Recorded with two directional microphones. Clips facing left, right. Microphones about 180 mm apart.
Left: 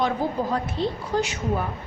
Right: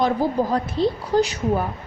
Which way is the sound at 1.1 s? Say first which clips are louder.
Right 6 dB; 35° right (ahead or behind).